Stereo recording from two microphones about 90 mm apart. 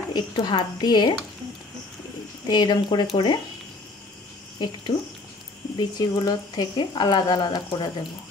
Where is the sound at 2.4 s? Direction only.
55° left (ahead or behind).